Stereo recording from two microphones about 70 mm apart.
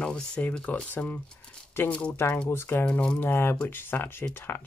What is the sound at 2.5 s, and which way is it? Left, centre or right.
Speech, left.